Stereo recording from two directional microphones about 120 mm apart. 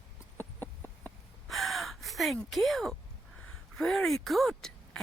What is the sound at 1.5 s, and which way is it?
Gasp, centre (ahead or behind).